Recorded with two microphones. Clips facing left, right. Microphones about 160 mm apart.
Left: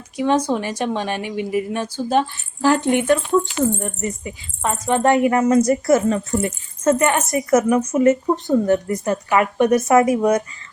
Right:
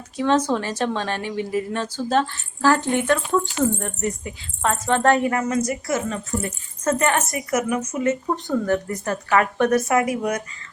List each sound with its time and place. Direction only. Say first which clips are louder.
0.2 s speech: left 1 dB; 10° left (ahead or behind)
3.8 s speech: left 1 dB; 5° left (ahead or behind)
5.3 s a woman's voice: left 7 dB; 30° left (ahead or behind)
6.8 s speech: left 4 dB; 15° left (ahead or behind)
7.3 s a woman's voice: left 7 dB; 30° left (ahead or behind)
8.3 s a woman's voice: left 5 dB; 25° left (ahead or behind)